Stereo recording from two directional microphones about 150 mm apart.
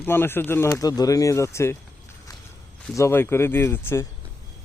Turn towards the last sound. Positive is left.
turn(degrees=15)  # may be behind; listen again after turning